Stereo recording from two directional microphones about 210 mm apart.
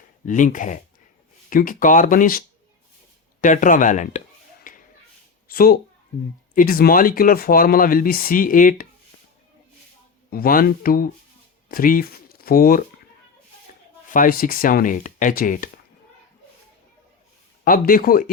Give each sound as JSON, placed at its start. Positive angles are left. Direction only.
{"t": 0.3, "sound": "speech", "side_deg": 40}
{"t": 3.4, "sound": "speech", "side_deg": 40}
{"t": 4.7, "sound": "a sound", "side_deg": 40}
{"t": 5.5, "sound": "speech", "side_deg": 45}
{"t": 10.2, "sound": "speech", "side_deg": 45}
{"t": 14.1, "sound": "speech", "side_deg": 40}
{"t": 17.7, "sound": "speech", "side_deg": 45}